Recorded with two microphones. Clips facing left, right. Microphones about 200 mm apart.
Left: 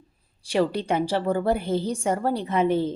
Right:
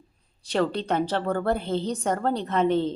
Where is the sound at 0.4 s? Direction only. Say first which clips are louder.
Left 2 dB; 10° left (ahead or behind).